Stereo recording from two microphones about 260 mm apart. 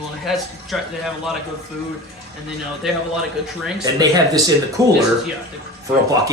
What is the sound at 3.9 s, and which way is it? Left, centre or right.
Speech, centre.